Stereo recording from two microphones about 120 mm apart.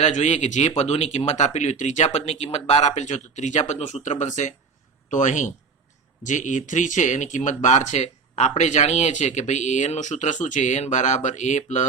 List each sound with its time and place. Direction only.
0.0 s speech: 75° left (ahead or behind)
0.8 s speech: 60° left (ahead or behind); by 11.9 s 75° left (ahead or behind)